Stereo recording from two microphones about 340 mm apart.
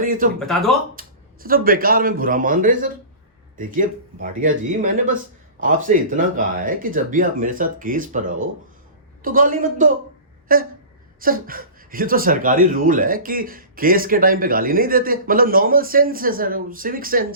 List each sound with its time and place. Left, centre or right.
0.0 s a sound: right
0.3 s speech: centre
0.9 s speech: right
5.5 s speech: right